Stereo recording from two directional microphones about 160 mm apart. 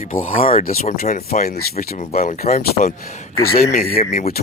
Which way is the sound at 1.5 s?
75° left (ahead or behind).